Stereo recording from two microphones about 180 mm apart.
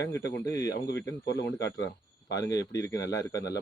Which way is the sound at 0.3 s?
20° left (ahead or behind).